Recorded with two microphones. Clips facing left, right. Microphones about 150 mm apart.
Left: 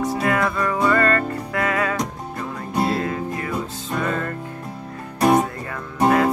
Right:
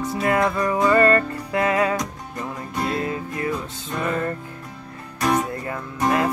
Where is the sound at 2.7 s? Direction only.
35° left (ahead or behind).